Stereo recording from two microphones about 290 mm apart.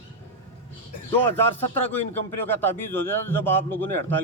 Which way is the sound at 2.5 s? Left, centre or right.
Centre.